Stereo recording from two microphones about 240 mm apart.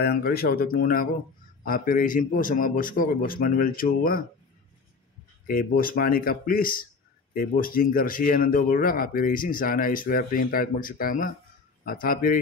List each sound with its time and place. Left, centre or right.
0.0 s speech: left
5.5 s speech: left